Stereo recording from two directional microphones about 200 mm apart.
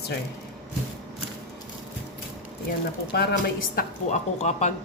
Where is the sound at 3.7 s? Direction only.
35° left (ahead or behind).